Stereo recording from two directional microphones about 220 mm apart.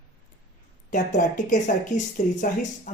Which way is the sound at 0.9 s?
35° left (ahead or behind).